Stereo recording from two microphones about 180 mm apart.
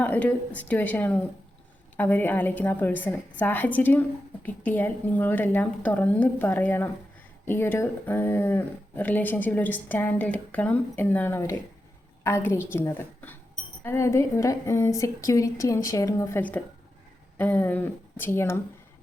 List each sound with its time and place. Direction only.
0.0 s speech: 10° left (ahead or behind)